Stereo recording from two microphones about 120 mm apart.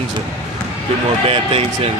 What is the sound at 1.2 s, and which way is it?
Speech, 50° right (ahead or behind).